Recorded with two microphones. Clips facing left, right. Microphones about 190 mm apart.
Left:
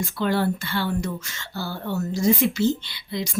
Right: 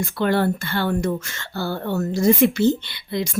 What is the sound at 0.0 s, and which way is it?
A woman's voice, 60° right (ahead or behind).